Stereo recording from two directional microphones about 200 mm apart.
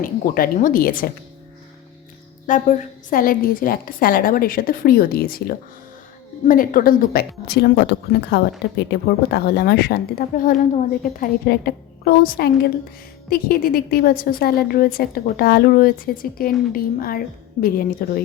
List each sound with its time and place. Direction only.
0.0 s a woman's voice: 45° left (ahead or behind)
2.5 s a woman's voice: 40° left (ahead or behind)